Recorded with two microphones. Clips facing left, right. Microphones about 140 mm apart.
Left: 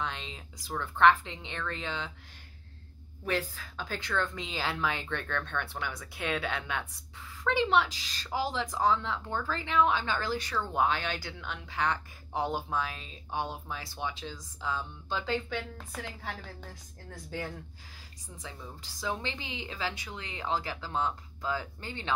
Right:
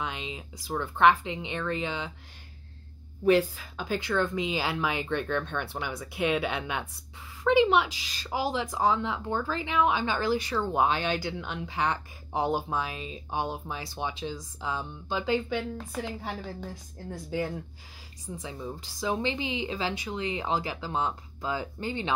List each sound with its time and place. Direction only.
0.0 s speech: 10° right (ahead or behind)
3.3 s speech: 15° right (ahead or behind)